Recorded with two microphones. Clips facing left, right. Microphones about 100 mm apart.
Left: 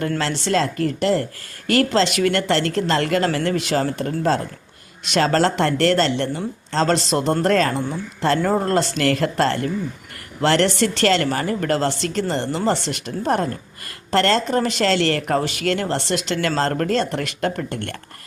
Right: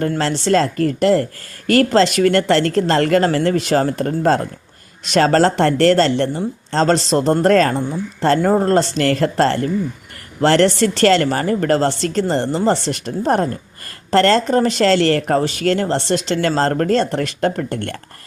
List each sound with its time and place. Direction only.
0.2 s speech: 40° right (ahead or behind)